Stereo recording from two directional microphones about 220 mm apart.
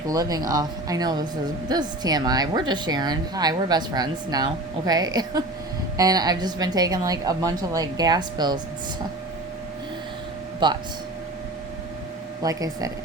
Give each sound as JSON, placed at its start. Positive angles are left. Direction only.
{"t": 0.1, "sound": "a woman's voice", "side_deg": -15}
{"t": 10.6, "sound": "speech", "side_deg": -20}
{"t": 12.4, "sound": "a woman's voice", "side_deg": -15}